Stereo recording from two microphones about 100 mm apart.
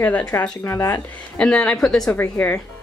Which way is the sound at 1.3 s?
10° left (ahead or behind).